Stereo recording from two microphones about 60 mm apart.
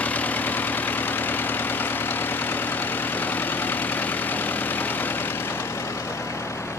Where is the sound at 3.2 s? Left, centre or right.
Left.